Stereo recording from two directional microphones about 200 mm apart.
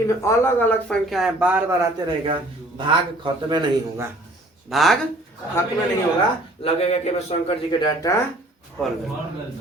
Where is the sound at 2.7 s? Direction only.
25° right (ahead or behind).